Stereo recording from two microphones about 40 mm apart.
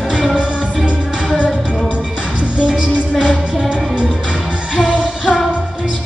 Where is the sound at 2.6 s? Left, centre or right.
Centre.